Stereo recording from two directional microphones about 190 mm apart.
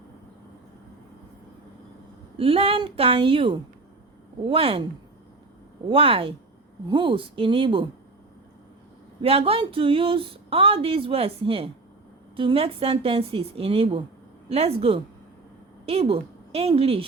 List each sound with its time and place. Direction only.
2.4 s speech: 30° right (ahead or behind)
5.9 s speech: 30° right (ahead or behind)
9.2 s speech: 30° right (ahead or behind)